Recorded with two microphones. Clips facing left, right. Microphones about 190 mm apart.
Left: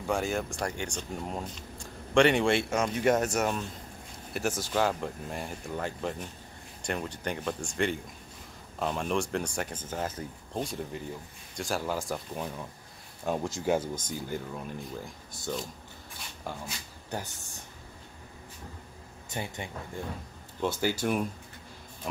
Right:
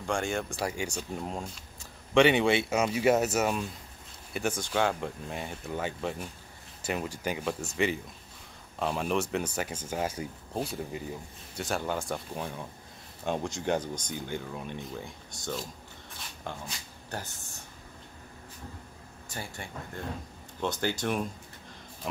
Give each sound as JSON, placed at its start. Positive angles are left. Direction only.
{"t": 0.0, "sound": "speech", "side_deg": 5}
{"t": 19.2, "sound": "speech", "side_deg": 20}
{"t": 20.6, "sound": "speech", "side_deg": 10}
{"t": 22.0, "sound": "music", "side_deg": 0}